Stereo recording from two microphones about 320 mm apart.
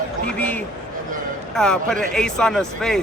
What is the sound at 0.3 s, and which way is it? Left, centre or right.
Speech, centre.